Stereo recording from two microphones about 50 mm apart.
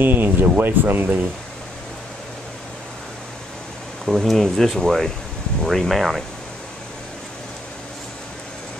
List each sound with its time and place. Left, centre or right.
0.0 s speech: right
4.0 s speech: centre